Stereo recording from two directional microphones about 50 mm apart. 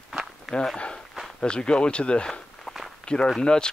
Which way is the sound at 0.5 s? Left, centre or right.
Centre.